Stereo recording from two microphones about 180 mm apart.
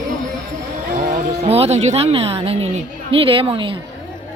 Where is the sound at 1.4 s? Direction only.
35° right (ahead or behind).